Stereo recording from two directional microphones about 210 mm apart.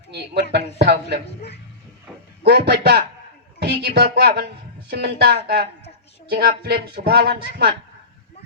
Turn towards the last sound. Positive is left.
turn(degrees=-50)  # may be behind; listen again after turning